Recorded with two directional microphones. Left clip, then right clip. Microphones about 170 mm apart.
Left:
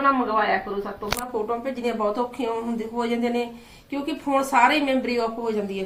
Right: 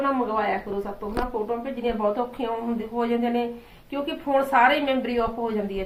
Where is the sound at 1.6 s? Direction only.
10° left (ahead or behind).